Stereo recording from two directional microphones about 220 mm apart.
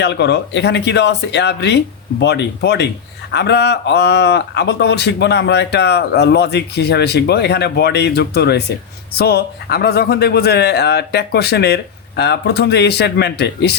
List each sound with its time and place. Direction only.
0.0 s a man's voice: 50° left (ahead or behind)